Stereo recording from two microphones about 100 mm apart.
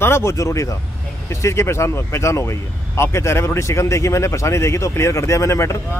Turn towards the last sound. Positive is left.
turn(degrees=30)  # may be behind; listen again after turning